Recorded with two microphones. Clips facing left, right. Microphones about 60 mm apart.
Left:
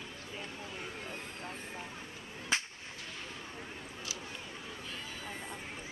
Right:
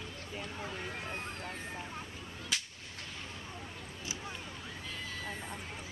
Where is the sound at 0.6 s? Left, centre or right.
Right.